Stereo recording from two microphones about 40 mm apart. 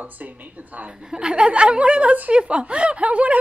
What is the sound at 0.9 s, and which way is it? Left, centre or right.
A woman's voice, right.